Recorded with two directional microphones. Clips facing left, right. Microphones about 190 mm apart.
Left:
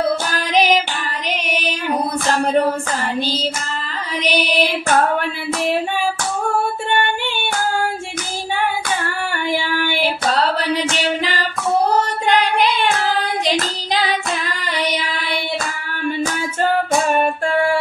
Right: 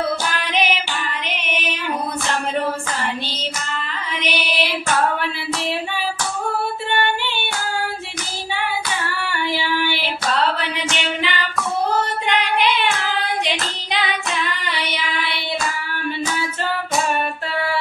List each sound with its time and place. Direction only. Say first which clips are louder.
0.3 s music: left 4 dB; 40° left (ahead or behind)
4.2 s music: left 6 dB; 40° left (ahead or behind)
9.2 s child singing: left 2 dB; 50° left (ahead or behind)
10.0 s female singing: left 4 dB; 35° left (ahead or behind)
11.9 s child singing: left 4 dB; 40° left (ahead or behind)
13.5 s singing: left 5 dB; 40° left (ahead or behind)
16.3 s female singing: left 6 dB; 45° left (ahead or behind)